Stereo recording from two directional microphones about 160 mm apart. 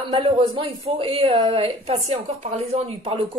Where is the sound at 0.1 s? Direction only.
35° right (ahead or behind).